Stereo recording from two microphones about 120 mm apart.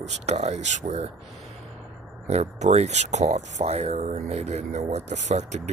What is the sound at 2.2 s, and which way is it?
Speech, 65° right (ahead or behind).